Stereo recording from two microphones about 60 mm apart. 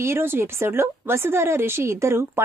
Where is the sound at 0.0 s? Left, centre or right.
Right.